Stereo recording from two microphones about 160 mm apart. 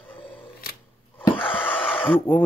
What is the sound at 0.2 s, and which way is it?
Camera, 35° left (ahead or behind).